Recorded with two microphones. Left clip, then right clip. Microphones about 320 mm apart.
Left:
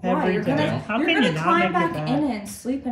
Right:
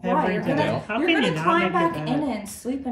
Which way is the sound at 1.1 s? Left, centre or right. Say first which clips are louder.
Left 1 dB; centre.